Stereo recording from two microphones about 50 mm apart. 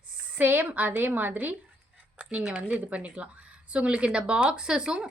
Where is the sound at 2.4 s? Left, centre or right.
Right.